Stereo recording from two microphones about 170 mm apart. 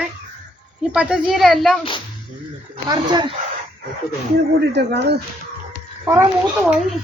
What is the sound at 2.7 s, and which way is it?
Speech, 25° right (ahead or behind).